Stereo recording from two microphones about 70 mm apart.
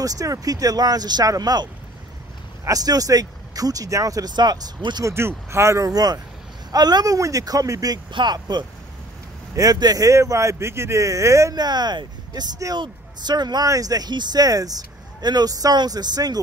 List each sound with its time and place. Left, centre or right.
0.0 s speech: right
2.6 s speech: right
5.0 s speech: right
5.9 s speech: right
7.2 s speech: right
7.9 s speech: right
9.6 s speech: right
11.5 s speech: right
13.7 s speech: right